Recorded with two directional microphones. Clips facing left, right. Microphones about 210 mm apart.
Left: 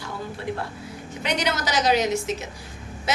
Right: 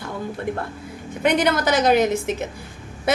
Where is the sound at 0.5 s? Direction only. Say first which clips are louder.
Right 3 dB; 50° right (ahead or behind).